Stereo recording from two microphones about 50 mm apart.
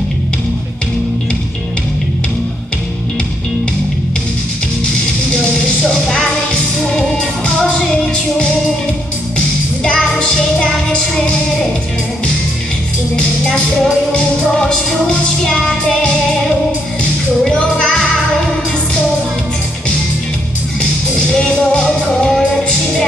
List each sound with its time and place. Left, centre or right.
5.9 s music: centre
7.0 s music: left
9.8 s music: centre
14.1 s music: centre
17.4 s music: centre
21.3 s music: centre